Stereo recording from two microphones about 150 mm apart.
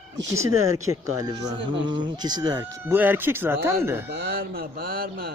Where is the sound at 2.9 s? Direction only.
15° right (ahead or behind).